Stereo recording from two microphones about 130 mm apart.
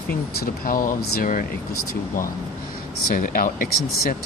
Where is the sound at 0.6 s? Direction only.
90° left.